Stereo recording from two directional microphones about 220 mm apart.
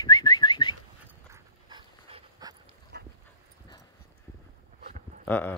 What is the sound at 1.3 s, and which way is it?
Dog, 20° right (ahead or behind).